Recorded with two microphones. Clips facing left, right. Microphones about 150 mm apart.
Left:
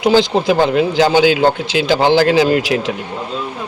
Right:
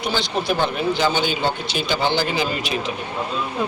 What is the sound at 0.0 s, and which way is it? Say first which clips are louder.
Speech: left 11 dB; 90° left.